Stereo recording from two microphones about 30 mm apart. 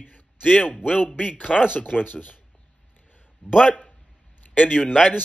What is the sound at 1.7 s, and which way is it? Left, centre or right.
Speech, left.